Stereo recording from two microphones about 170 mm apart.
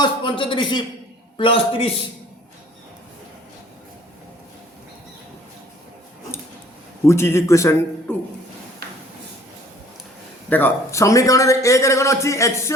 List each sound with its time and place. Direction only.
0.0 s a man's voice: 30° left (ahead or behind)
7.0 s a man's voice: 15° left (ahead or behind)
10.5 s a man's voice: 15° left (ahead or behind)